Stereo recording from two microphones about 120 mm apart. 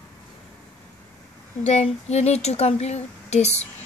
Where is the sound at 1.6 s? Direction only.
65° left (ahead or behind).